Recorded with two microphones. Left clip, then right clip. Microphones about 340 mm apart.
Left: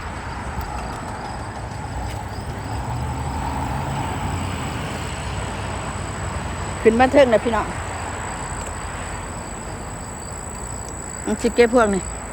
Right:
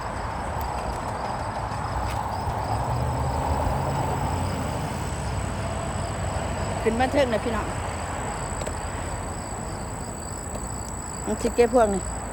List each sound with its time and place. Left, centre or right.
6.8 s speech: centre
11.4 s speech: left